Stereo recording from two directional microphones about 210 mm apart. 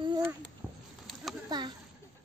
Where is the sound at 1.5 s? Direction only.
20° right (ahead or behind).